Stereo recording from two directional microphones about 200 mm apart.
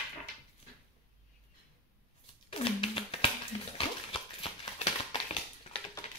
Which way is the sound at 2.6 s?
30° left (ahead or behind).